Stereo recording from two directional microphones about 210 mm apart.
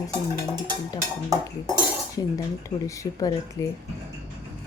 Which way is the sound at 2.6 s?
15° left (ahead or behind).